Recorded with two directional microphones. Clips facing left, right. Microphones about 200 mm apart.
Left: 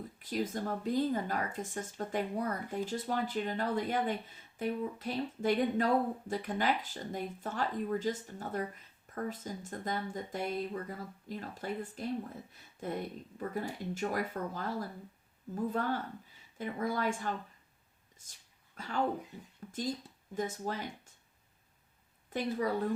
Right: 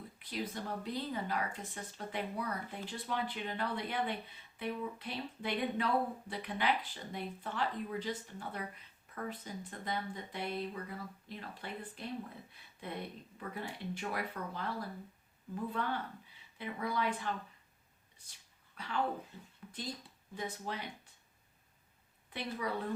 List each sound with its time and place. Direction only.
0.2 s speech: 45° left (ahead or behind)
19.6 s a sound: 45° left (ahead or behind)
20.3 s speech: 45° left (ahead or behind)
22.3 s a woman's voice: 45° left (ahead or behind)